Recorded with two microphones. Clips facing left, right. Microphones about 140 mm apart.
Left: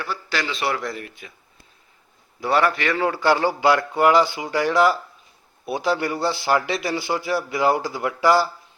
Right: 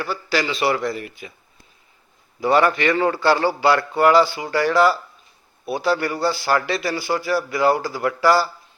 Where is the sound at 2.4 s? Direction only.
Centre (ahead or behind).